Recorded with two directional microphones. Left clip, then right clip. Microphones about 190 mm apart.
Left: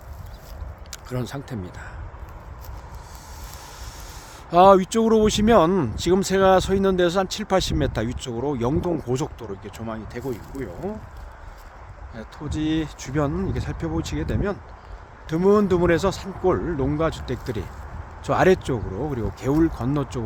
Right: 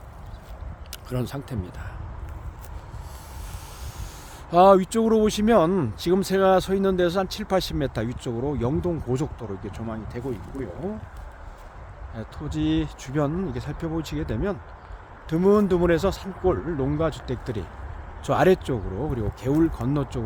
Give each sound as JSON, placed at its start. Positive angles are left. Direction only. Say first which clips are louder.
{"t": 0.9, "sound": "speech", "louder": "even", "side_deg": 0}
{"t": 4.4, "sound": "speech", "louder": "left 2 dB", "side_deg": 5}
{"t": 12.1, "sound": "speech", "louder": "left 1 dB", "side_deg": 5}